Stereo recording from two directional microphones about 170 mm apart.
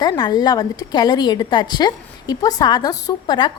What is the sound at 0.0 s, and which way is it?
A woman's voice, 25° left (ahead or behind).